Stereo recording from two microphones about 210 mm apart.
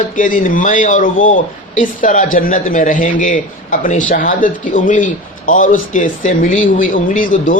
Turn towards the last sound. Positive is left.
turn(degrees=40)  # may be behind; listen again after turning